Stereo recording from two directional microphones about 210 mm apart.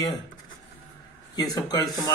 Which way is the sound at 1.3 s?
20° left (ahead or behind).